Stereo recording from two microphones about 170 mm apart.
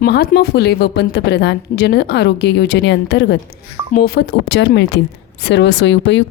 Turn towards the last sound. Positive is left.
turn(degrees=90)